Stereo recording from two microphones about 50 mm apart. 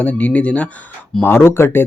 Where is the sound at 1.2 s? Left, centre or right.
Left.